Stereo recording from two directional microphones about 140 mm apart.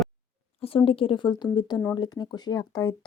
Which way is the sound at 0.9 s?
40° left (ahead or behind).